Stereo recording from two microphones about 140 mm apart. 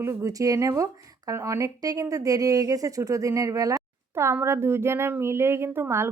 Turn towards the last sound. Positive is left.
turn(degrees=-20)  # may be behind; listen again after turning